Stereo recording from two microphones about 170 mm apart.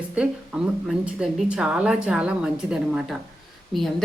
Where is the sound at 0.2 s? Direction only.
5° right (ahead or behind).